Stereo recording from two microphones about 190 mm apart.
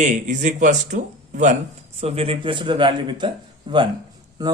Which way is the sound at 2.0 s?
30° right (ahead or behind).